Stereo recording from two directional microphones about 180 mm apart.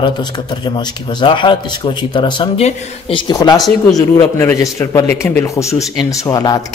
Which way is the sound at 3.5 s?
Centre (ahead or behind).